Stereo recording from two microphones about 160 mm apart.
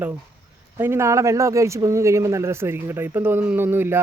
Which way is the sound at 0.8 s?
15° right (ahead or behind).